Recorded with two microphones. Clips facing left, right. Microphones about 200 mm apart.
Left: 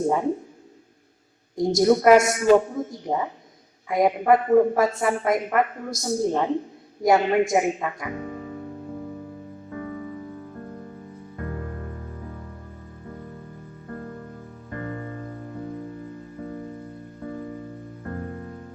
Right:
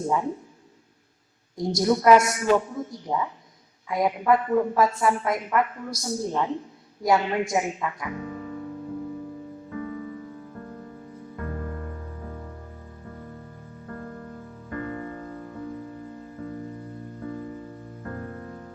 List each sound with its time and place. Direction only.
0.1 s a man's voice: 55° left (ahead or behind)
1.5 s a woman's voice: 20° left (ahead or behind)
1.8 s a woman's voice: 55° left (ahead or behind)